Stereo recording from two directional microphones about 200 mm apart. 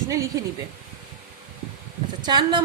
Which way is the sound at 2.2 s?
20° right (ahead or behind).